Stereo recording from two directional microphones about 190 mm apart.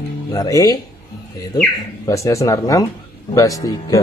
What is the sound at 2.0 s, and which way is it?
Speech, 15° left (ahead or behind).